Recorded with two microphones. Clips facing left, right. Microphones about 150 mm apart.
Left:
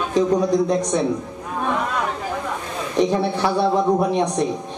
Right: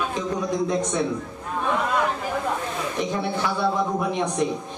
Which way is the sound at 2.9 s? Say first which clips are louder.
Left 9 dB; 35° left (ahead or behind).